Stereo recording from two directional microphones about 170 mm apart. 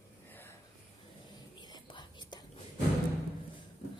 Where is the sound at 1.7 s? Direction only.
25° left (ahead or behind).